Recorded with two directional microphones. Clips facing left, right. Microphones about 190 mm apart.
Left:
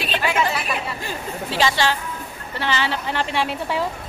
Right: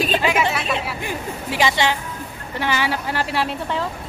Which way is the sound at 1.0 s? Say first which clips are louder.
Right 1 dB; 15° right (ahead or behind).